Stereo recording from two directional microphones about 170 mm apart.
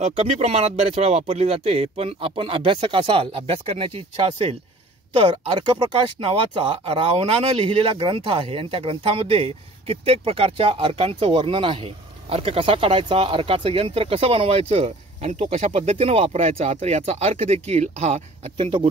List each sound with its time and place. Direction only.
0.0 s speech: 40° right (ahead or behind)